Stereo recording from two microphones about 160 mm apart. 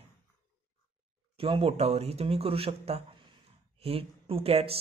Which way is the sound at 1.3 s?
35° right (ahead or behind).